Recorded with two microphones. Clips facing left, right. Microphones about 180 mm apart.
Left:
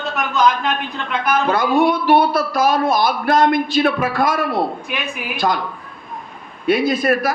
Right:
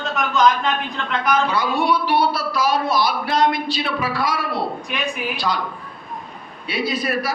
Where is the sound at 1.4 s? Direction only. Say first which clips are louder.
Left 5 dB; 50° left (ahead or behind).